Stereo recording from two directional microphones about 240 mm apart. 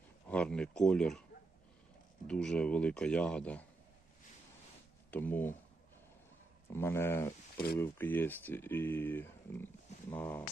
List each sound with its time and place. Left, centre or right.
0.3 s speech: centre
2.2 s speech: centre
5.1 s speech: centre
6.7 s speech: centre